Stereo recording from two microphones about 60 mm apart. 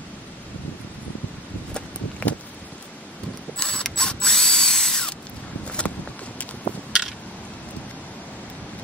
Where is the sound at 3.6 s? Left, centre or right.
Centre.